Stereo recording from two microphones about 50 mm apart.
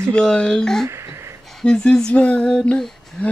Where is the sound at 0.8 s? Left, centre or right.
Right.